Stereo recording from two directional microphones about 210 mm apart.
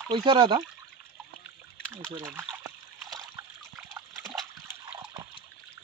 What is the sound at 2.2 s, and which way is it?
Speech, 10° right (ahead or behind).